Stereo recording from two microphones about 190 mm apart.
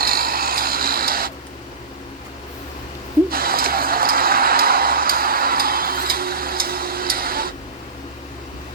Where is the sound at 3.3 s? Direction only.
50° right (ahead or behind).